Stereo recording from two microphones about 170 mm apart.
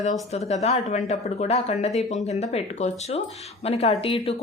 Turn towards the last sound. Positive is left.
turn(degrees=35)  # may be behind; listen again after turning